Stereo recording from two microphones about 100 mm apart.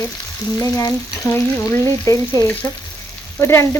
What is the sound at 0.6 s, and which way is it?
Frying, 35° left (ahead or behind).